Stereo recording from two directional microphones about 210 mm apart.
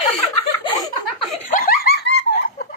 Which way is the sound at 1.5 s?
45° left (ahead or behind).